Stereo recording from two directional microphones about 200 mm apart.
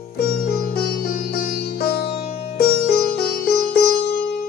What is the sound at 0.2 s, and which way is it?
Music, 50° left (ahead or behind).